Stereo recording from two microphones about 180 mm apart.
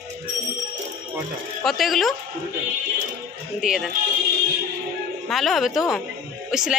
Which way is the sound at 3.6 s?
5° right (ahead or behind).